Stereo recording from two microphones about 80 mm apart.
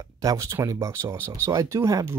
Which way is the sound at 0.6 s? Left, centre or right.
Right.